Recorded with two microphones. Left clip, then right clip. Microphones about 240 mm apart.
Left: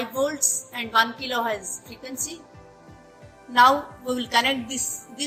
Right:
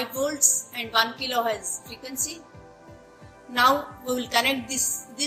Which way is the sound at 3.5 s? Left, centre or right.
Left.